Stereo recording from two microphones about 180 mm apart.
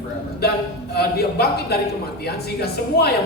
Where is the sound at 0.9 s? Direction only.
60° left (ahead or behind).